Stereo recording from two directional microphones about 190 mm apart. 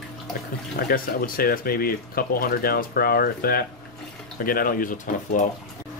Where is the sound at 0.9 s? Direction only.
50° left (ahead or behind).